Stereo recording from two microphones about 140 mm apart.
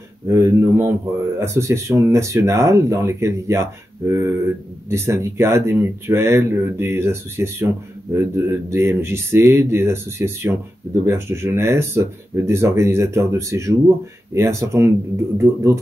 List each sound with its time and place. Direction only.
0.3 s speech: 20° right (ahead or behind)